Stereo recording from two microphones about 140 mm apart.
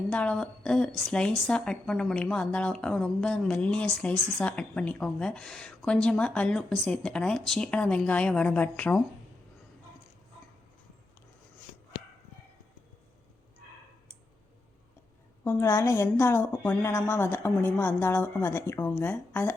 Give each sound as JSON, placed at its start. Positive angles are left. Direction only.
{"t": 0.1, "sound": "a woman's voice", "side_deg": 5}
{"t": 11.9, "sound": "a sound", "side_deg": 85}
{"t": 15.4, "sound": "a woman's voice", "side_deg": 20}